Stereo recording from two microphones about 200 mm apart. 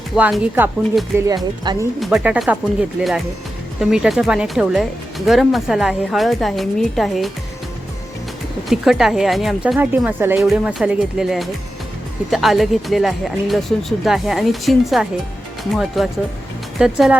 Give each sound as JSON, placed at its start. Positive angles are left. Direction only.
{"t": 0.2, "sound": "speech", "side_deg": -10}
{"t": 1.7, "sound": "speech", "side_deg": -20}
{"t": 2.0, "sound": "speech", "side_deg": -5}
{"t": 3.8, "sound": "speech", "side_deg": 0}
{"t": 8.7, "sound": "speech", "side_deg": 0}